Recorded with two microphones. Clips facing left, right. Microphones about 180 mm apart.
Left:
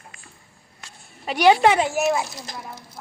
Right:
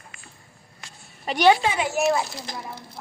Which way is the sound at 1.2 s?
5° left (ahead or behind).